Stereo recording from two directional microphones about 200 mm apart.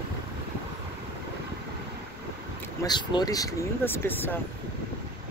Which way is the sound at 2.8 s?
20° left (ahead or behind).